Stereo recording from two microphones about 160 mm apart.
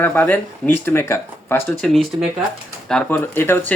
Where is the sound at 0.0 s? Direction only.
10° left (ahead or behind).